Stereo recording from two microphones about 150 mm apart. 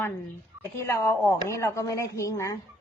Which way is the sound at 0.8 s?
20° left (ahead or behind).